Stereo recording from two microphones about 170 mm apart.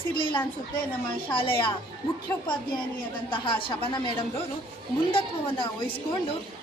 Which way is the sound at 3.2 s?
30° left (ahead or behind).